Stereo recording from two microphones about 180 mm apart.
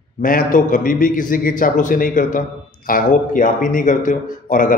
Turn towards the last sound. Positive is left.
turn(degrees=50)  # may be behind; listen again after turning